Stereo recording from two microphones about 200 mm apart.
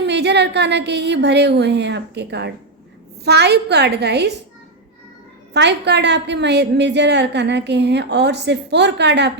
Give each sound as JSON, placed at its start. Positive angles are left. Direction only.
{"t": 0.0, "sound": "a woman's voice", "side_deg": -55}
{"t": 5.5, "sound": "a woman's voice", "side_deg": -60}